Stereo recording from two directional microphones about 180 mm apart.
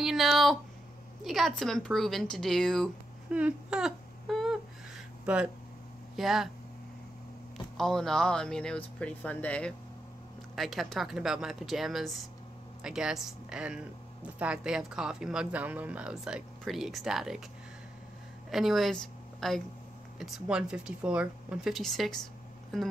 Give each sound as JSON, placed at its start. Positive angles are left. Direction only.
{"t": 0.0, "sound": "speech", "side_deg": 0}
{"t": 7.7, "sound": "speech", "side_deg": 0}
{"t": 18.5, "sound": "a woman's voice", "side_deg": 0}